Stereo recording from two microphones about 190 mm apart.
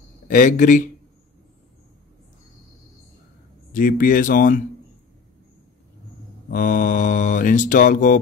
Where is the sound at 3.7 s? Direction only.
45° left (ahead or behind).